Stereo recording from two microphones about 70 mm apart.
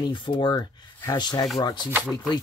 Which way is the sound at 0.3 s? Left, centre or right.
Left.